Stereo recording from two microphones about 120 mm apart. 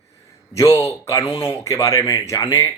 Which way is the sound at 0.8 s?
25° left (ahead or behind).